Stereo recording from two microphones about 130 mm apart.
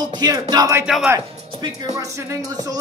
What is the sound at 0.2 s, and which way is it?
Speech, 30° right (ahead or behind).